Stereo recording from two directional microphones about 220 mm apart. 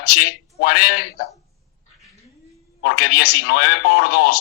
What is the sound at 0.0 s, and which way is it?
A man's voice, 50° left (ahead or behind).